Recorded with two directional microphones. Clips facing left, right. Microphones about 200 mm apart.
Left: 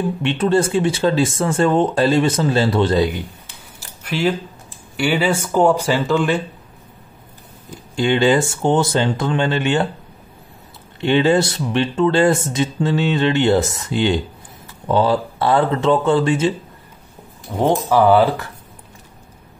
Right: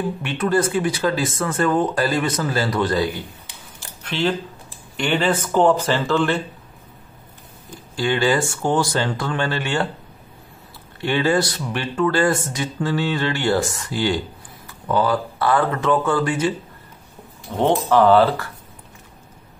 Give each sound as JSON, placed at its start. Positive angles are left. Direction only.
{"t": 0.2, "sound": "speech", "side_deg": 25}
{"t": 4.0, "sound": "speech", "side_deg": 10}
{"t": 7.9, "sound": "speech", "side_deg": 25}
{"t": 11.0, "sound": "speech", "side_deg": 20}
{"t": 17.6, "sound": "speech", "side_deg": 10}